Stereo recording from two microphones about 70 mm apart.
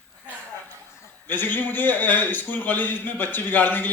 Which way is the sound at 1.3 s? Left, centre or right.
Left.